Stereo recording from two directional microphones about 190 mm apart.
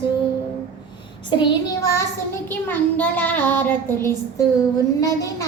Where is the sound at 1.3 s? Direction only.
20° left (ahead or behind).